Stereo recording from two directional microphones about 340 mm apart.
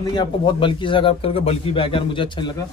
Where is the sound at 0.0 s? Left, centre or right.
Centre.